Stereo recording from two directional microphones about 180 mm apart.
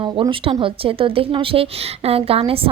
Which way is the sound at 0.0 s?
30° right (ahead or behind).